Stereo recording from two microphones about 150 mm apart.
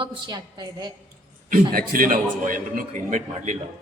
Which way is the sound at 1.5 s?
70° right (ahead or behind).